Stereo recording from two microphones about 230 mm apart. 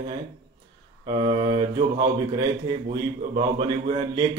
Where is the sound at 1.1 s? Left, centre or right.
Right.